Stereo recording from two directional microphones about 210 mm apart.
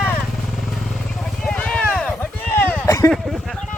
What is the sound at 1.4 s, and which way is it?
Vehicle, 5° left (ahead or behind).